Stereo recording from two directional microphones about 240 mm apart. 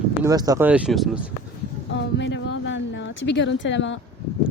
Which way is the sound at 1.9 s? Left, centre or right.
Left.